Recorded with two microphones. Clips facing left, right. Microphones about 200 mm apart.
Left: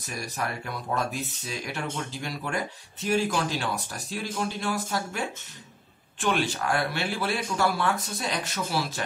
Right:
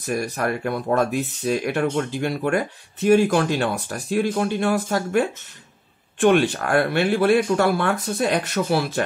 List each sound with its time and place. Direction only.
0.0 s speech: 60° right (ahead or behind)